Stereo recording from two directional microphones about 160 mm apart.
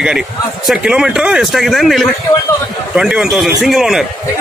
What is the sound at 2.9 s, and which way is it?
A man's voice, 5° right (ahead or behind).